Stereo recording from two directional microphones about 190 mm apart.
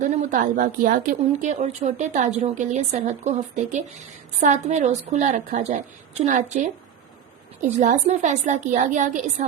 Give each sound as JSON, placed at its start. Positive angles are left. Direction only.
{"t": 0.0, "sound": "a woman's voice", "side_deg": -40}
{"t": 7.8, "sound": "a woman's voice", "side_deg": -40}